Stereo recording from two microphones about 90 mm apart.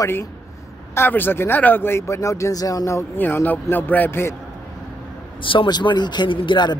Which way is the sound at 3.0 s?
25° left (ahead or behind).